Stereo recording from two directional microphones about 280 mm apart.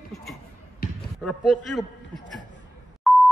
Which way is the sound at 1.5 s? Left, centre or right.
Centre.